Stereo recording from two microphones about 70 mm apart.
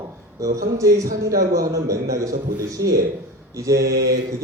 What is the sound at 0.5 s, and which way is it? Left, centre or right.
Speech, right.